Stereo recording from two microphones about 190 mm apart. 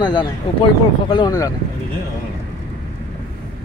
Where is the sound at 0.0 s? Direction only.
20° left (ahead or behind).